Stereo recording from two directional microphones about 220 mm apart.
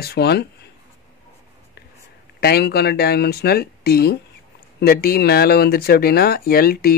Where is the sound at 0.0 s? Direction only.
45° left (ahead or behind).